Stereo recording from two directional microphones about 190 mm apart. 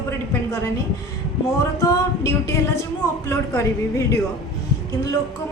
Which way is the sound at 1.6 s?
15° left (ahead or behind).